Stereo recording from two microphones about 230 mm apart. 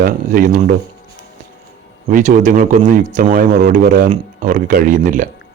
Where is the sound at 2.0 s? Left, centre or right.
Right.